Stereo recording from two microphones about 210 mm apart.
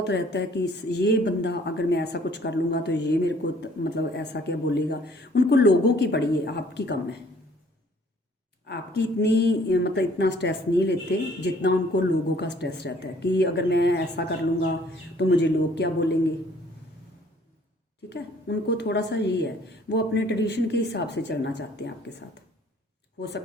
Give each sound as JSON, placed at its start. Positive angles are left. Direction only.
{"t": 0.0, "sound": "speech", "side_deg": 55}
{"t": 8.6, "sound": "speech", "side_deg": 50}
{"t": 18.1, "sound": "speech", "side_deg": 55}